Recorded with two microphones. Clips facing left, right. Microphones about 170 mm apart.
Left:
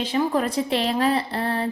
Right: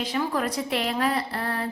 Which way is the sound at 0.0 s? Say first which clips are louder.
Left 4 dB; 25° left (ahead or behind).